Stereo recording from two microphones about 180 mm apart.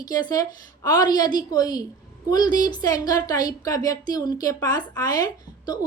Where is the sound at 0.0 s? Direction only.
20° left (ahead or behind).